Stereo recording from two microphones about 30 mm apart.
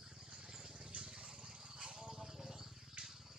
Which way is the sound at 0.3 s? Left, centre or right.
Right.